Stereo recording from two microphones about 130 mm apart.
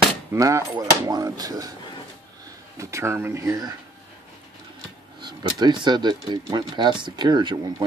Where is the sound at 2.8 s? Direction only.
20° right (ahead or behind).